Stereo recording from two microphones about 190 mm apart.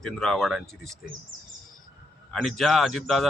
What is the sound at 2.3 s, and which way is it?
Speech, centre (ahead or behind).